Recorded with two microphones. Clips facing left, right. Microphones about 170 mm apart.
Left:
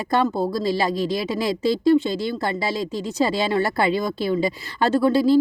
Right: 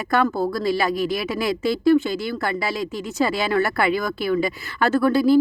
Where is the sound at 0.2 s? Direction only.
30° left (ahead or behind).